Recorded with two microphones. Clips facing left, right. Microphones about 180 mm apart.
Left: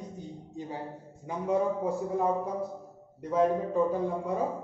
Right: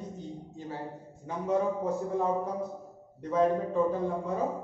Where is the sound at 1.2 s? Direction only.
10° left (ahead or behind).